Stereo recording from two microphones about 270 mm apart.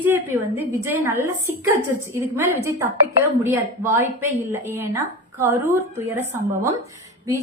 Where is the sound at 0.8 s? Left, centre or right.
Centre.